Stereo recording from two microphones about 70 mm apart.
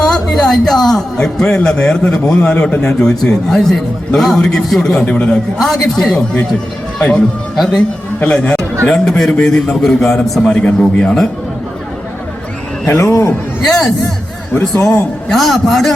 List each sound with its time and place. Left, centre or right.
0.1 s a man's voice: centre
5.5 s a man's voice: centre
7.5 s a man's voice: centre
8.2 s a man's voice: centre
13.0 s speech: left
13.7 s a man's voice: centre
15.3 s a man's voice: centre